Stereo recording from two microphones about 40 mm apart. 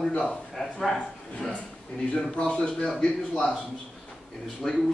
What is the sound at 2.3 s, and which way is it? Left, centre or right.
Speech, left.